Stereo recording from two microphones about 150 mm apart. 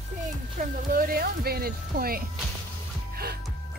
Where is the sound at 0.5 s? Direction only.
75° right (ahead or behind).